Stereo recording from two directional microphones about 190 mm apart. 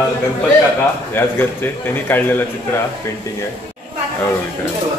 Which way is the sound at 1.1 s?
10° left (ahead or behind).